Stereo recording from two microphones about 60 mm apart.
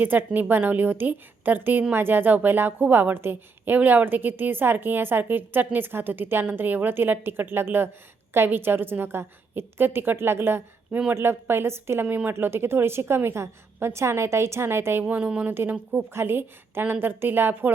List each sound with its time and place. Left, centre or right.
0.0 s a woman's voice: right
12.0 s speech: right
12.3 s a woman's voice: right
15.0 s a woman's voice: right